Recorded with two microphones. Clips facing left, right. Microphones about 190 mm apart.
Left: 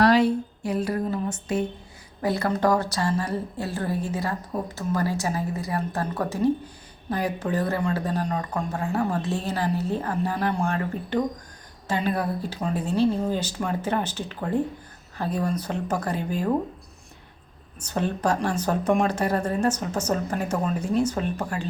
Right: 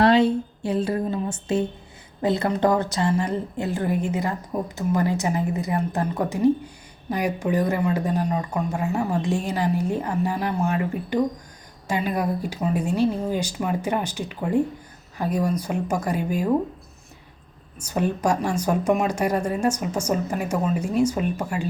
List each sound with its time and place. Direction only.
0.0 s a woman's voice: 25° right (ahead or behind)
17.7 s a man's voice: 10° right (ahead or behind)